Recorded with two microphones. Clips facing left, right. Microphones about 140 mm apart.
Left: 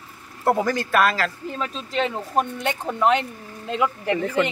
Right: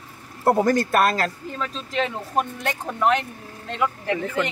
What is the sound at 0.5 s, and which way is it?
Speech, 40° right (ahead or behind).